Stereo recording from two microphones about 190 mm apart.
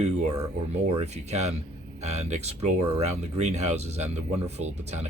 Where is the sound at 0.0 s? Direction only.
35° right (ahead or behind).